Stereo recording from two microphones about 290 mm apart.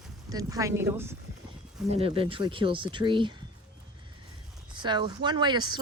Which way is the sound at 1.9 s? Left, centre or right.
Centre.